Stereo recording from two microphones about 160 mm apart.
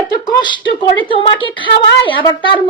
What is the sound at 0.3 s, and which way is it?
A woman's voice, 30° left (ahead or behind).